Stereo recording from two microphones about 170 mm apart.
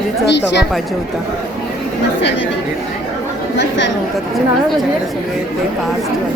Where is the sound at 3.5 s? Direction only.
90° left.